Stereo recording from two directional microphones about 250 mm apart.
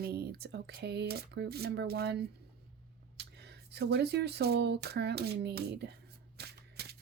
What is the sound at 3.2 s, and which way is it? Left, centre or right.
Speech, right.